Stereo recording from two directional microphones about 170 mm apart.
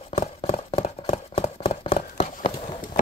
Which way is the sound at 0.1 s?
35° left (ahead or behind).